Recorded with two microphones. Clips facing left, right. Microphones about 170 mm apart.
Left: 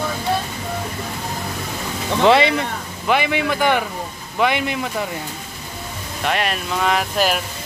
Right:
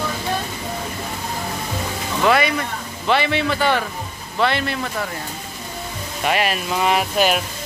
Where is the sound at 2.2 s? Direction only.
25° left (ahead or behind).